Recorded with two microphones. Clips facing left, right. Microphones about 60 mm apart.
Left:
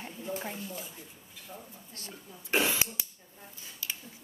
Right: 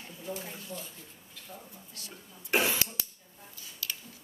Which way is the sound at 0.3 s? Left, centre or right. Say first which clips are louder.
Left 2 dB; left.